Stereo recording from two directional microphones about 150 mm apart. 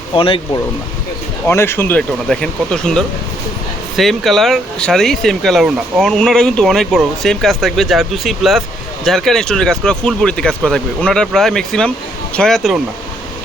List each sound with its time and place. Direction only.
0.1 s speech: 35° left (ahead or behind)
1.5 s speech: 15° left (ahead or behind)